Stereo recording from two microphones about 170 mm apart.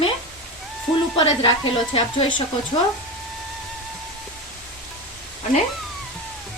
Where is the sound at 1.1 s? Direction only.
30° left (ahead or behind).